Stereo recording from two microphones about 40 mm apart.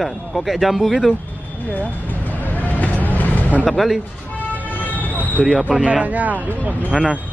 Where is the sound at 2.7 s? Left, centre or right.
Left.